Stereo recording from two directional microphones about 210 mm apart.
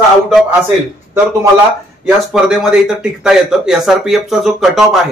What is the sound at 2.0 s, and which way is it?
Speech, centre (ahead or behind).